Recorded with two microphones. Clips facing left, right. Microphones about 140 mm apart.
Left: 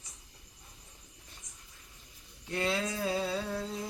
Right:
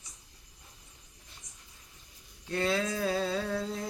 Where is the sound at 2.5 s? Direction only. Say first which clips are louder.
Right 2 dB; 15° left (ahead or behind).